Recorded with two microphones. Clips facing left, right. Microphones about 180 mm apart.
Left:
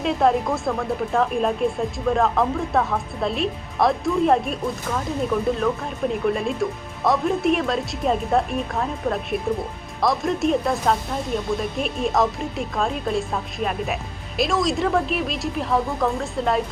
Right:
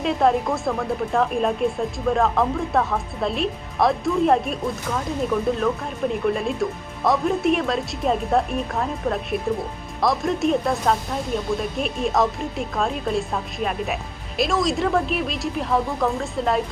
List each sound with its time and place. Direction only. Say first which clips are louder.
0.0 s speech: even; centre (ahead or behind)